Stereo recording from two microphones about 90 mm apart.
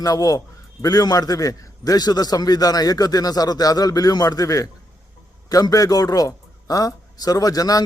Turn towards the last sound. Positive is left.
turn(degrees=45)  # may be behind; listen again after turning